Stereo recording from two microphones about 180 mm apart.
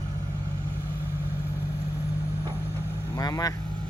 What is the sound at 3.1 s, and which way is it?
Speech, 20° left (ahead or behind).